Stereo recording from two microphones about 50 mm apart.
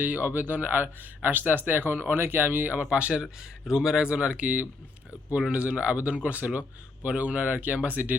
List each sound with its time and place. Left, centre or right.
0.0 s speech: right
2.9 s speech: right